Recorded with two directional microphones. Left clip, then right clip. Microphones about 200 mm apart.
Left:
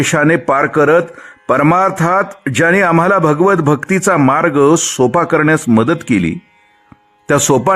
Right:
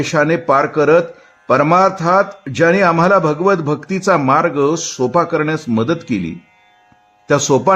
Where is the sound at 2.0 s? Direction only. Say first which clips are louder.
Even; 35° left (ahead or behind).